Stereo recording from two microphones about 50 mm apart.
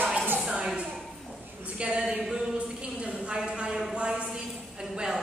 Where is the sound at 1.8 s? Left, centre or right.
Centre.